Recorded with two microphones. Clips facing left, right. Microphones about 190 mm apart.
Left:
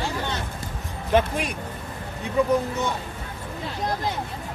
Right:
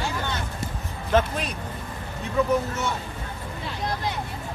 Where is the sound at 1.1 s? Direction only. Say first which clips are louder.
Left 1 dB; 10° left (ahead or behind).